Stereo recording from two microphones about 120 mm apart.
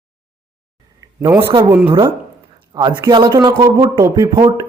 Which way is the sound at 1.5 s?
40° right (ahead or behind).